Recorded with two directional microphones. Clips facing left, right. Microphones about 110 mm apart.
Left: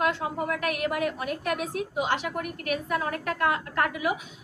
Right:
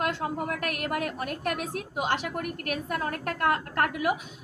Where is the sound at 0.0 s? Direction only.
50° right (ahead or behind).